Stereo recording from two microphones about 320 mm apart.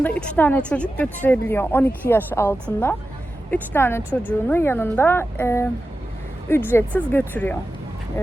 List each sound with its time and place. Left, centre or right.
0.0 s a woman's voice: centre